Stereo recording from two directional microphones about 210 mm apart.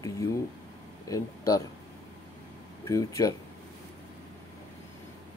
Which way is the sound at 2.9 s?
15° left (ahead or behind).